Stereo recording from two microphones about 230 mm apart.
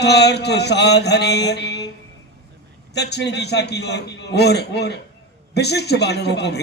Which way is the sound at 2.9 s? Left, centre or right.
Left.